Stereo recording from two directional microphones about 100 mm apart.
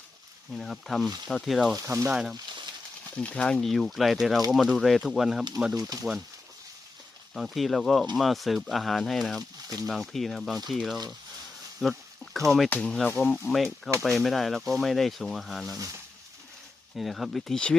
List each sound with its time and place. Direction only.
0.5 s speech: 5° left (ahead or behind)
1.7 s speech: 30° right (ahead or behind)
2.0 s speech: 5° right (ahead or behind)
3.2 s speech: 10° left (ahead or behind); by 6.2 s 5° right (ahead or behind)
7.3 s speech: centre (ahead or behind)
11.8 s a sound: centre (ahead or behind)
12.7 s speech: 10° left (ahead or behind)
13.5 s speech: centre (ahead or behind)
15.7 s speech: 35° right (ahead or behind)
16.9 s speech: centre (ahead or behind)